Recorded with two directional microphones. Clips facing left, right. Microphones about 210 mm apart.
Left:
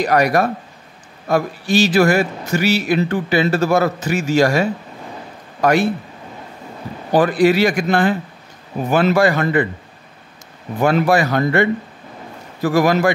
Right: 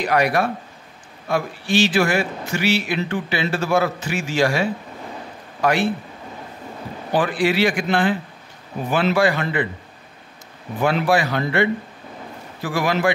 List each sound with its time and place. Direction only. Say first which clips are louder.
0.0 s a man's voice: left 4 dB; 40° left (ahead or behind)
7.1 s a man's voice: left 6 dB; 40° left (ahead or behind)
10.8 s a man's voice: left 4 dB; 45° left (ahead or behind)